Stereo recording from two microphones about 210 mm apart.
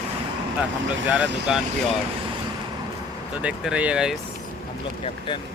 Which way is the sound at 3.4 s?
5° right (ahead or behind).